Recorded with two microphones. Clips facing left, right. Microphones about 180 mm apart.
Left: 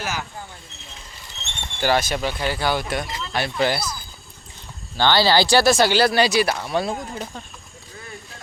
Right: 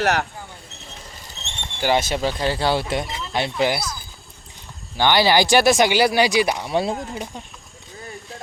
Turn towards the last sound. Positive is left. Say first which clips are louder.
# right 1 dB
turn(degrees=-15)  # may be behind; listen again after turning